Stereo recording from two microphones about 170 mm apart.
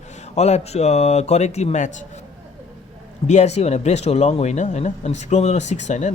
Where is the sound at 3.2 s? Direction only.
40° left (ahead or behind).